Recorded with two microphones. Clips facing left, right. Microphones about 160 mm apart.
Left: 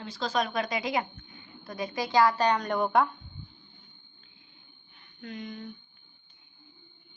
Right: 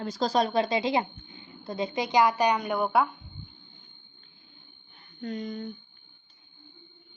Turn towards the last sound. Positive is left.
turn(degrees=-40)  # may be behind; listen again after turning